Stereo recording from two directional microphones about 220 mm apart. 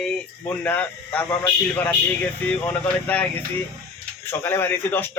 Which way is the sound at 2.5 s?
5° left (ahead or behind).